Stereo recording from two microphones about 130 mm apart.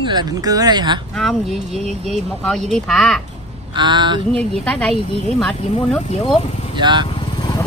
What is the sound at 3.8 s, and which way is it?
Speech, 35° right (ahead or behind).